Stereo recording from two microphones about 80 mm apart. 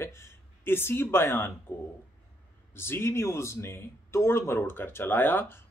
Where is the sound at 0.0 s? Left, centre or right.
Left.